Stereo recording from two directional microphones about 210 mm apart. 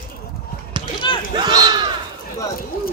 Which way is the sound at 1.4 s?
20° right (ahead or behind).